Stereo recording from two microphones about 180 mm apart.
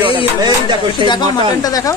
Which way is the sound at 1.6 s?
20° left (ahead or behind).